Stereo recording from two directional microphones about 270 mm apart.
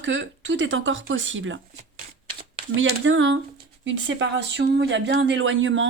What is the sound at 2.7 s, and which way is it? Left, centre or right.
Speech, right.